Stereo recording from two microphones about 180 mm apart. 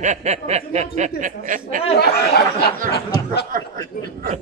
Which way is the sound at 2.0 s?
60° left (ahead or behind).